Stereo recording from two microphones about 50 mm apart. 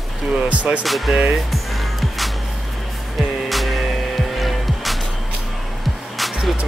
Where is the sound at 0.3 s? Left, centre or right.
Right.